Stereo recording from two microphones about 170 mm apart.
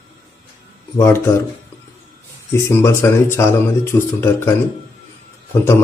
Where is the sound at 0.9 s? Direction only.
15° left (ahead or behind).